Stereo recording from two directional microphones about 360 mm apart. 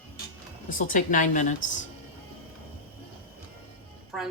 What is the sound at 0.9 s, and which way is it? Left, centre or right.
Speech, left.